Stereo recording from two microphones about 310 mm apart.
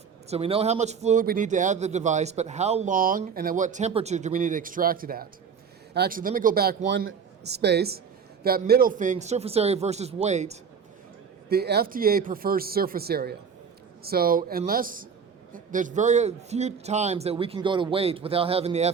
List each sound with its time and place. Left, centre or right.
0.3 s a man's voice: centre